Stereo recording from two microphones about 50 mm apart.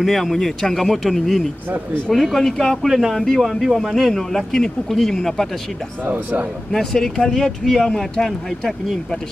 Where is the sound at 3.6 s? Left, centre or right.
Centre.